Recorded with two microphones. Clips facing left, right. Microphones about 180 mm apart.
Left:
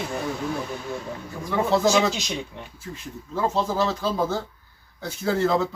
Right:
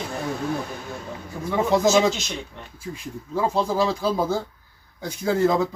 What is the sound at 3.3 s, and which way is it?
Speech, 10° right (ahead or behind).